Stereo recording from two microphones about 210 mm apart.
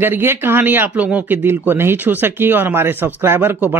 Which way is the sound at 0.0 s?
10° right (ahead or behind).